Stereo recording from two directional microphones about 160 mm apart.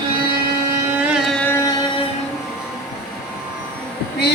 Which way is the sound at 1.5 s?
15° left (ahead or behind).